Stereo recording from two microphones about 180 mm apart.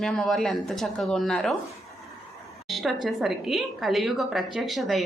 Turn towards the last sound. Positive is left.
turn(degrees=0)  # may be behind; listen again after turning